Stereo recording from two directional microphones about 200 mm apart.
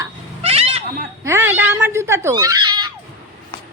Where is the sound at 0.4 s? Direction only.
30° right (ahead or behind).